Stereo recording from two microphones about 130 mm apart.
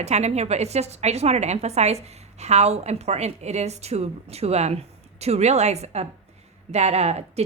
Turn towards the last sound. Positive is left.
turn(degrees=-55)  # may be behind; listen again after turning